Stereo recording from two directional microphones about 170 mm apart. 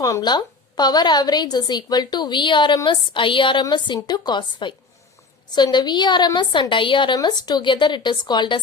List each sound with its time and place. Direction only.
0.0 s a woman's voice: 20° left (ahead or behind)